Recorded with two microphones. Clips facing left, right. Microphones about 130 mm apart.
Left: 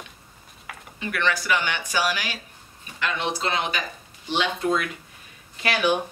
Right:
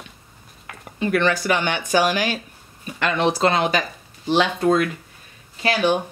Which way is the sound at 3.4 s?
45° right (ahead or behind).